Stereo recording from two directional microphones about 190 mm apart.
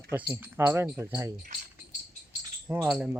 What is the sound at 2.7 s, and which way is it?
Speech, 10° right (ahead or behind).